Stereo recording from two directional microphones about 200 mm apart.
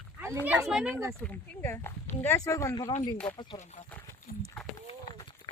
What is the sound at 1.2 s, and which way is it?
Speech, 10° left (ahead or behind).